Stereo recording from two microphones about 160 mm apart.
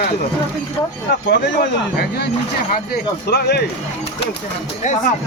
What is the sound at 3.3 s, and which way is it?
Speech, 90° left.